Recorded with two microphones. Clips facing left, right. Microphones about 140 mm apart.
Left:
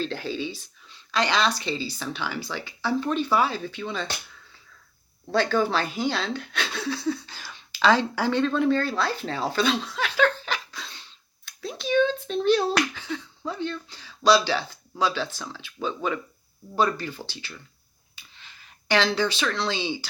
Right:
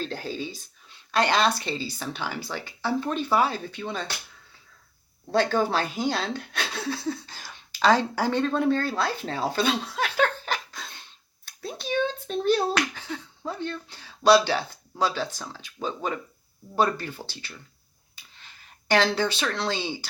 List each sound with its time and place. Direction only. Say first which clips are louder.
0.0 s speech: left 2 dB; 45° right (ahead or behind)
5.3 s speech: even; 45° right (ahead or behind)
7.1 s a sound: left 3 dB; 45° right (ahead or behind)
12.9 s speech: left 3 dB; 40° right (ahead or behind)
16.7 s speech: even; 55° right (ahead or behind)